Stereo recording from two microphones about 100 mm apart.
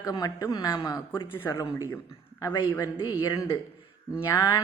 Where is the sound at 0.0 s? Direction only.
40° left (ahead or behind).